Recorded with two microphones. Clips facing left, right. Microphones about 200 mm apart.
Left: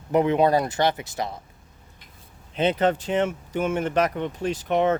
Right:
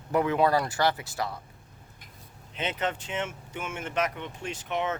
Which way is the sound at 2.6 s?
35° left (ahead or behind).